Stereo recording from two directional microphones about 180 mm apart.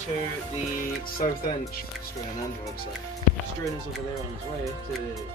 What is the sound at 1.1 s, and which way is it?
Speech, 50° left (ahead or behind).